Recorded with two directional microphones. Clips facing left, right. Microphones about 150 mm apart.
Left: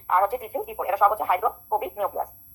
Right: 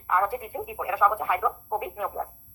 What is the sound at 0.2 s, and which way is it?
Speech, 40° left (ahead or behind).